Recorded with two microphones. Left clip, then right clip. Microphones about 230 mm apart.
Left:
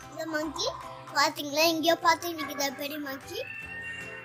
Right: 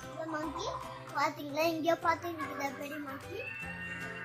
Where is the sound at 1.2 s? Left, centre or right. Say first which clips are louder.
Left 7 dB; left.